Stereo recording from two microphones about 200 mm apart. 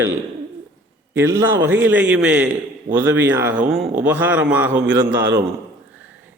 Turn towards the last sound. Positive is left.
turn(degrees=-60)  # may be behind; listen again after turning